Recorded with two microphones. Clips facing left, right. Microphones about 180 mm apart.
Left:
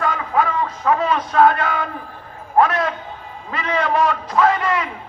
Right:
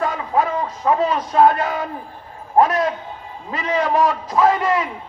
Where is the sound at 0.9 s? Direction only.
35° right (ahead or behind).